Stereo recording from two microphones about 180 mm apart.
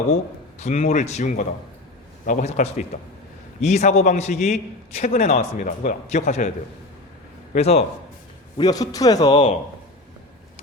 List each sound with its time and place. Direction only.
0.6 s a man's voice: 40° left (ahead or behind)
7.5 s a man's voice: 35° left (ahead or behind)
8.5 s a man's voice: 20° left (ahead or behind)